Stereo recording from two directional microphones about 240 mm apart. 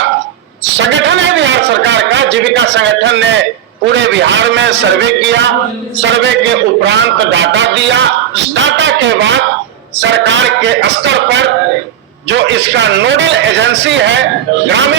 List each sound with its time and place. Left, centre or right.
0.8 s a man's voice: right